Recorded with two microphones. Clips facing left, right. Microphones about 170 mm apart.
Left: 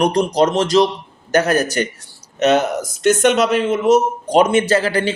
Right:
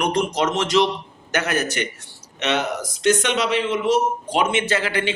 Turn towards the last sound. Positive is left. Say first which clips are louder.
# left 6 dB
turn(degrees=35)  # may be behind; listen again after turning